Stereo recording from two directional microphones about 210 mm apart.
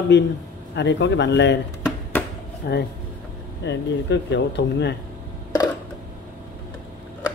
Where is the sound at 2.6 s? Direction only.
50° left (ahead or behind).